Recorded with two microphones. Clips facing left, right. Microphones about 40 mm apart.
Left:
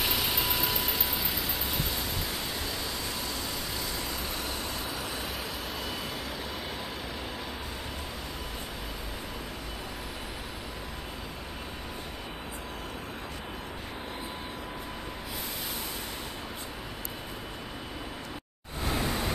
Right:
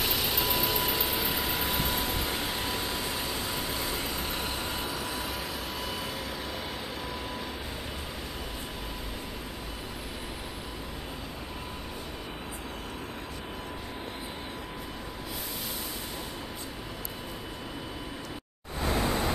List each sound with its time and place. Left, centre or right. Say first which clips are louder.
0.0 s vehicle: even; centre
1.1 s vehicle: right 3 dB; right
18.8 s a sound: right 2 dB; right